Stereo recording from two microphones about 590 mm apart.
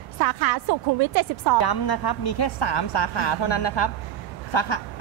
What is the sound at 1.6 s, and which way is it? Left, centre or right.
Speech, left.